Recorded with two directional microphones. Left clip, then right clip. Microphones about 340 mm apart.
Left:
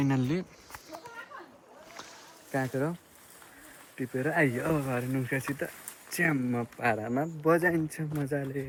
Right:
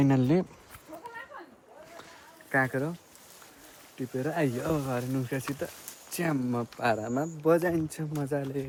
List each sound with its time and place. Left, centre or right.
0.0 s speech: centre
2.5 s speech: centre
4.0 s speech: centre